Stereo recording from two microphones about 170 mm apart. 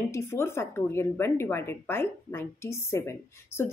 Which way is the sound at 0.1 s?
15° left (ahead or behind).